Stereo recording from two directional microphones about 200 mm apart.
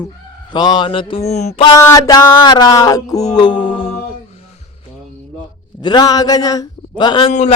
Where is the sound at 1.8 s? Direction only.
15° left (ahead or behind).